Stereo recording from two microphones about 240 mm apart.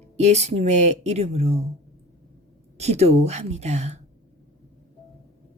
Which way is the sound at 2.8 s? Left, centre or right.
Right.